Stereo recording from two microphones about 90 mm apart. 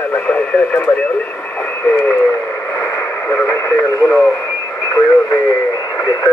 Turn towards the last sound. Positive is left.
turn(degrees=50)  # may be behind; listen again after turning